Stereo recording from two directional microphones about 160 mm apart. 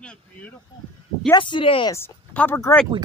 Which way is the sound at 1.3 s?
30° left (ahead or behind).